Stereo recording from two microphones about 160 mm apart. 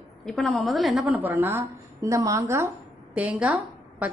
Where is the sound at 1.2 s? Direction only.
10° right (ahead or behind).